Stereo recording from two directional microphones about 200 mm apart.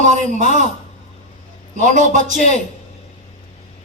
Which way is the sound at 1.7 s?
35° right (ahead or behind).